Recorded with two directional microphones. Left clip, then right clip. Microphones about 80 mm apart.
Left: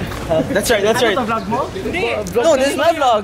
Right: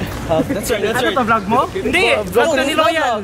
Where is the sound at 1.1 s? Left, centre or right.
Centre.